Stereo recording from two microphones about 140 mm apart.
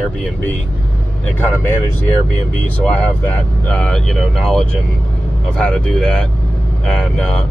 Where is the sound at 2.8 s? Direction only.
10° left (ahead or behind).